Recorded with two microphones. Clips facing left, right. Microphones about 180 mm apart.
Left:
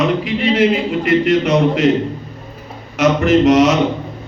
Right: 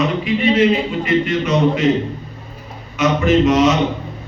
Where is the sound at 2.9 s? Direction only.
70° left (ahead or behind).